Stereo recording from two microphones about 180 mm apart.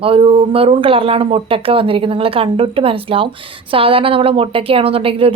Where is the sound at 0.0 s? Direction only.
30° right (ahead or behind).